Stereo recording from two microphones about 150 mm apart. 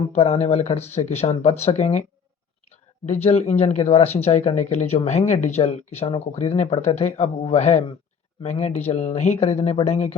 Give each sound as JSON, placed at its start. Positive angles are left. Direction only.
{"t": 0.1, "sound": "speech", "side_deg": 45}
{"t": 3.1, "sound": "speech", "side_deg": 45}